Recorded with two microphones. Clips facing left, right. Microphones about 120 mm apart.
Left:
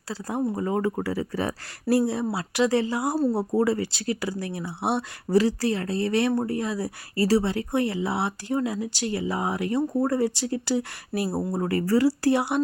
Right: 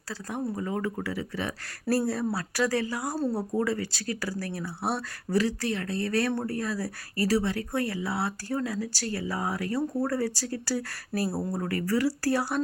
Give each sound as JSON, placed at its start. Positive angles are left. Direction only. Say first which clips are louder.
{"t": 0.1, "sound": "speech", "louder": "left 5 dB", "side_deg": 30}
{"t": 1.9, "sound": "speech", "louder": "left 4 dB", "side_deg": 20}